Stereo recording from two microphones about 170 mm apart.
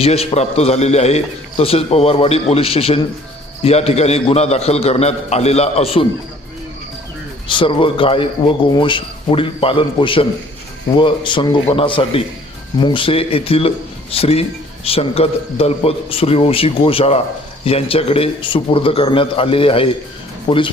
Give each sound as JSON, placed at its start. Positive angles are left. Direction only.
{"t": 0.0, "sound": "a man's voice", "side_deg": 35}
{"t": 7.4, "sound": "a man's voice", "side_deg": 30}